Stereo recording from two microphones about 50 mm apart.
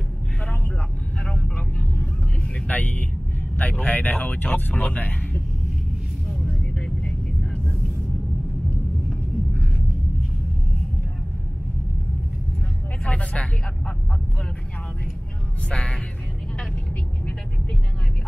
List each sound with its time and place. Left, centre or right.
1.2 s vehicle: left
3.8 s speech: left
6.2 s vehicle: centre
13.0 s a sound: left
15.7 s music: left